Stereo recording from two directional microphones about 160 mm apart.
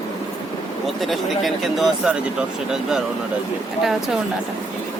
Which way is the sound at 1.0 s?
Centre (ahead or behind).